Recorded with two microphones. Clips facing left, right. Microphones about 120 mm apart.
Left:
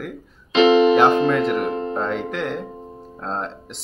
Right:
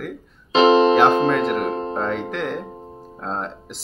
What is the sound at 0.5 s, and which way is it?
Music, 35° right (ahead or behind).